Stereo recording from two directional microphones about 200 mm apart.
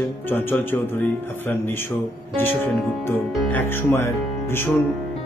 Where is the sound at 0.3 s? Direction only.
10° left (ahead or behind).